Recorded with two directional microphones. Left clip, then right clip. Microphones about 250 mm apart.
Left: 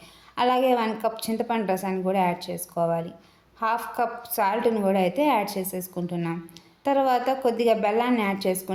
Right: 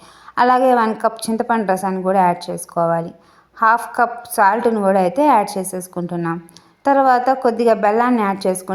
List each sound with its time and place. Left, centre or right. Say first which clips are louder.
0.3 s a woman's voice: right 8 dB; right